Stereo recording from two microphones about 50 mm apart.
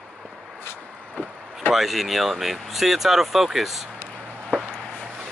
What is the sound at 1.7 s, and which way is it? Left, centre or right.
Speech, centre.